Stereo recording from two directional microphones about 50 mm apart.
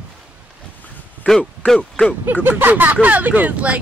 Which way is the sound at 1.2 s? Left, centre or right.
Centre.